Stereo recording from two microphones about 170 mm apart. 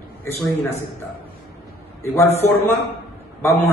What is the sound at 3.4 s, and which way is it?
Speech, 15° left (ahead or behind).